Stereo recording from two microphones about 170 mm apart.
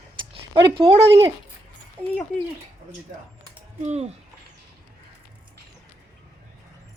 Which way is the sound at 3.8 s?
40° right (ahead or behind).